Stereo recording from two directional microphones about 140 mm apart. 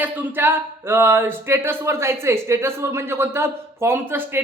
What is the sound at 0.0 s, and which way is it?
Speech, 15° right (ahead or behind).